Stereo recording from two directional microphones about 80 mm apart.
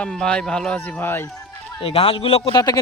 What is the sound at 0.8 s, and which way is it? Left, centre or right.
Speech, left.